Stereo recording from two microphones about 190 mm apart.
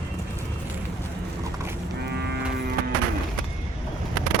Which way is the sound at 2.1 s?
60° right (ahead or behind).